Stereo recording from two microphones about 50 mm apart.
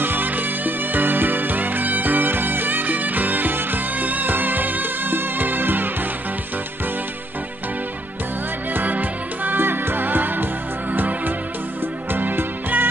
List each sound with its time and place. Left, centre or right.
0.0 s music: right
8.7 s music: right